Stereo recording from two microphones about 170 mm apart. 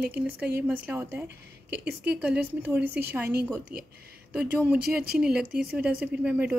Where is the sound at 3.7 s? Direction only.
60° right (ahead or behind).